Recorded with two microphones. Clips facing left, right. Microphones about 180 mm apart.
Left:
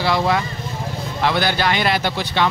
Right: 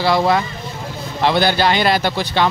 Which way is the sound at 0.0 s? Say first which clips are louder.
Right 3 dB; 40° right (ahead or behind).